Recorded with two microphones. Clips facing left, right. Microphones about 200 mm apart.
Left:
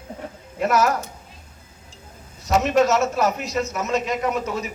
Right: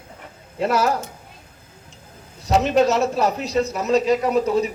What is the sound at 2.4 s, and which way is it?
A man's voice, 35° right (ahead or behind).